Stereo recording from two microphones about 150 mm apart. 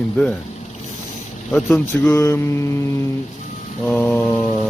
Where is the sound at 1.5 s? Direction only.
15° left (ahead or behind).